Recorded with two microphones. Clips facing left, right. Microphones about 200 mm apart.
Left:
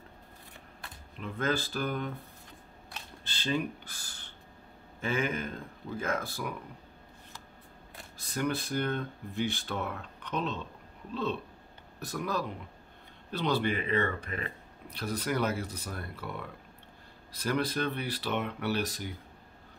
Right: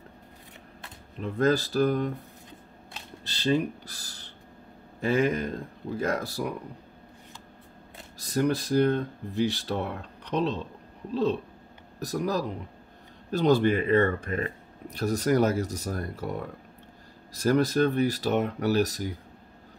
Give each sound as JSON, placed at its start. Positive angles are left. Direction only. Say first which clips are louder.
{"t": 1.2, "sound": "speech", "louder": "right 8 dB", "side_deg": -40}
{"t": 3.3, "sound": "speech", "louder": "right 6 dB", "side_deg": -35}
{"t": 8.2, "sound": "speech", "louder": "right 6 dB", "side_deg": -40}